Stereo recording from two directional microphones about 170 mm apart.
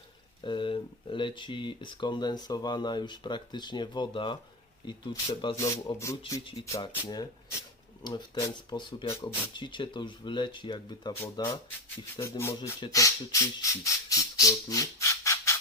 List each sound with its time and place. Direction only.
0.4 s speech: 30° left (ahead or behind)